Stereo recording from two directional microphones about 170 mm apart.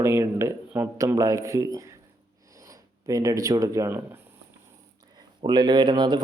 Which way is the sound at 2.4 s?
20° right (ahead or behind).